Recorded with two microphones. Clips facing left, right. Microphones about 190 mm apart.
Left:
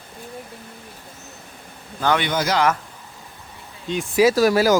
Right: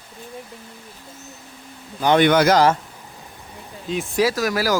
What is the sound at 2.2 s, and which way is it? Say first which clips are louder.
Speech: right 8 dB; 60° right (ahead or behind).